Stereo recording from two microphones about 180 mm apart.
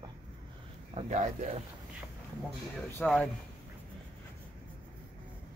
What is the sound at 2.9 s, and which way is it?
Speech, 5° left (ahead or behind).